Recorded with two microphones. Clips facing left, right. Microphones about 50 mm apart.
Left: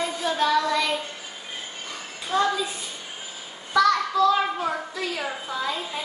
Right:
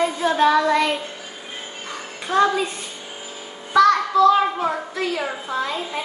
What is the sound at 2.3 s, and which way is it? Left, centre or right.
Speech, right.